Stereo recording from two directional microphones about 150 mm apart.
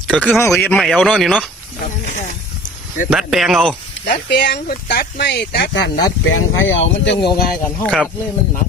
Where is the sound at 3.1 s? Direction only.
Centre (ahead or behind).